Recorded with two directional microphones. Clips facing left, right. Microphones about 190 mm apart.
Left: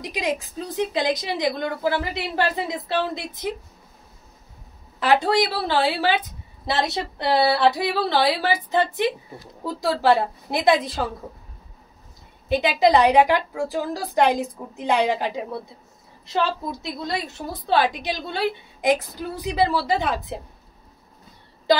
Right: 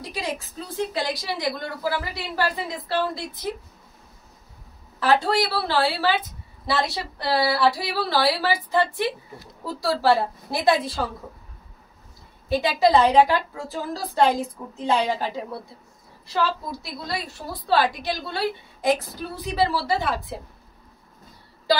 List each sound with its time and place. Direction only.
0.1 s a woman's voice: 15° left (ahead or behind)
5.0 s a woman's voice: 15° left (ahead or behind)
12.4 s a woman's voice: 20° left (ahead or behind)